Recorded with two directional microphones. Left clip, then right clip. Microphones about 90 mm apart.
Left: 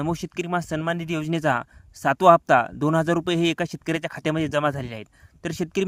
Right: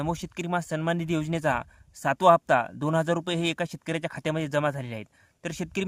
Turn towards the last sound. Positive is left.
turn(degrees=35)  # may be behind; listen again after turning